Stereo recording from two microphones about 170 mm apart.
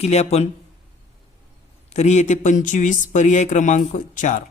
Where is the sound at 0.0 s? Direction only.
40° left (ahead or behind).